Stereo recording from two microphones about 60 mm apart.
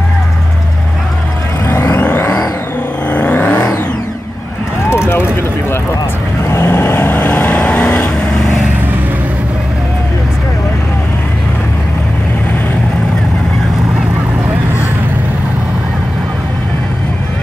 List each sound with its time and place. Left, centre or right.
1.7 s vehicle: left
2.2 s vehicle: left
3.1 s vehicle: left
4.8 s vehicle: left
7.2 s vehicle: left